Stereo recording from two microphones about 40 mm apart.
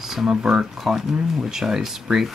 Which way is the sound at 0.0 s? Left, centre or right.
Centre.